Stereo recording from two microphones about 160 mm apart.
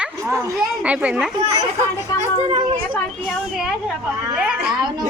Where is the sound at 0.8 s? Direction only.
10° right (ahead or behind).